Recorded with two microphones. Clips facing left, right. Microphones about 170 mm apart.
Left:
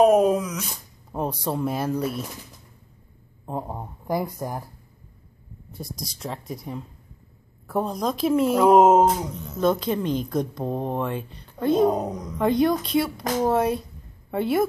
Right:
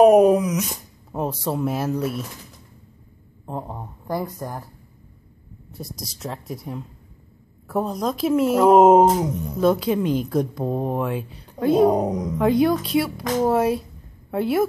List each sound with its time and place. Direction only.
0.0 s speech: 10° right (ahead or behind)
1.1 s speech: 5° right (ahead or behind)
3.4 s speech: 5° left (ahead or behind)
5.7 s speech: centre (ahead or behind)
9.2 s a woman's voice: 20° right (ahead or behind)
9.6 s speech: 5° right (ahead or behind)
11.9 s a woman's voice: 15° right (ahead or behind)
12.4 s speech: 5° right (ahead or behind)